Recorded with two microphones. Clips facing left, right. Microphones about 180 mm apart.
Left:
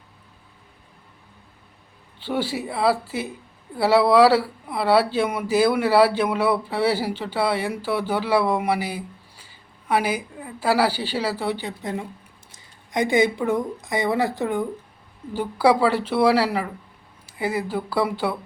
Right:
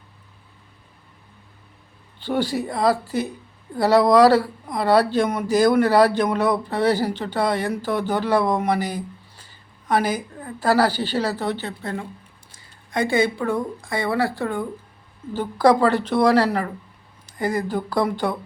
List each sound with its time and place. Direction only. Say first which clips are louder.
2.2 s a woman's voice: right 3 dB; 5° left (ahead or behind)